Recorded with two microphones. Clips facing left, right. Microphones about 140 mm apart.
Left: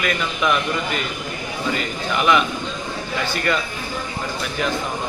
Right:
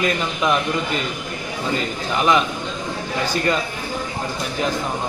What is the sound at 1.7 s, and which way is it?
Speech, 35° right (ahead or behind).